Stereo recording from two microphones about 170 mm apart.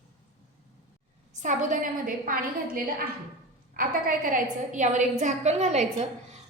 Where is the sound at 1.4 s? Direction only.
50° right (ahead or behind).